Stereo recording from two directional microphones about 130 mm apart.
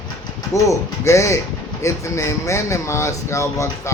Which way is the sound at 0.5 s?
25° left (ahead or behind).